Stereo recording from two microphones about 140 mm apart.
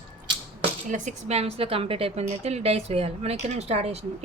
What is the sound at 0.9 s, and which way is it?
A woman's voice, 60° right (ahead or behind).